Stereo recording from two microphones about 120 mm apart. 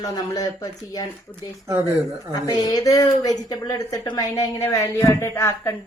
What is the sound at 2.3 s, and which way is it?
A woman's voice, 35° left (ahead or behind).